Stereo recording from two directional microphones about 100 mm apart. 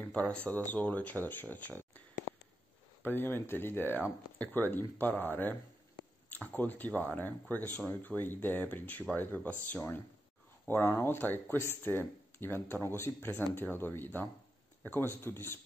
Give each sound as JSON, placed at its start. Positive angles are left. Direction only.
{"t": 0.0, "sound": "speech", "side_deg": 10}